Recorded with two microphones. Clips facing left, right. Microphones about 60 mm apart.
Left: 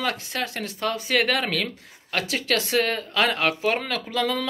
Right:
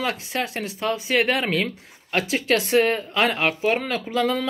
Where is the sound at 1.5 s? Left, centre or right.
Right.